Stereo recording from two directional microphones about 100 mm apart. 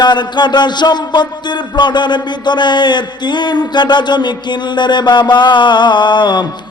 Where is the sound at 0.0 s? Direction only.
50° left (ahead or behind).